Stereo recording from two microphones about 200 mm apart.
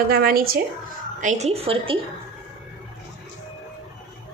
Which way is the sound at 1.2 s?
35° right (ahead or behind).